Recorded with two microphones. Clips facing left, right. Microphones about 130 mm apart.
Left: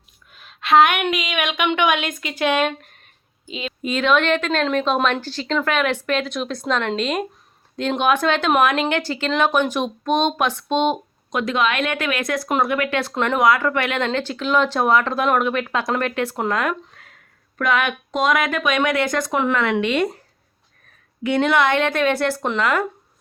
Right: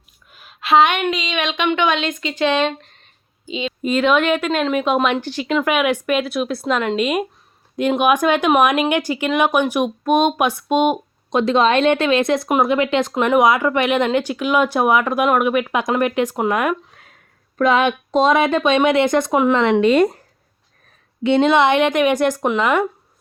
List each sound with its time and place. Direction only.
0.3 s a sound: 5° right (ahead or behind)
1.1 s speech: 5° left (ahead or behind); by 11.0 s 10° right (ahead or behind)
11.3 s speech: 30° right (ahead or behind)
17.6 s a woman's voice: 25° right (ahead or behind)
19.8 s speech: 40° right (ahead or behind)
21.2 s speech: 20° right (ahead or behind)